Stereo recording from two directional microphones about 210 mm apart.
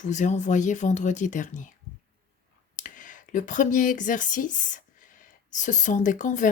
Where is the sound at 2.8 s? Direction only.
35° left (ahead or behind).